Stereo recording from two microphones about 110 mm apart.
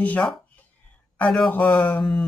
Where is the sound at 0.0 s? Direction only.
10° left (ahead or behind).